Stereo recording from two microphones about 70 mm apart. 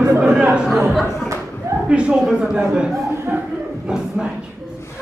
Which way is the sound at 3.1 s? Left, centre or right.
Right.